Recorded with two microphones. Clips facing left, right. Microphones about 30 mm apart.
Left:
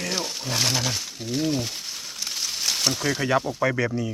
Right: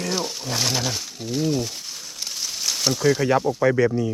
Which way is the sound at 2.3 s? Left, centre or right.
Centre.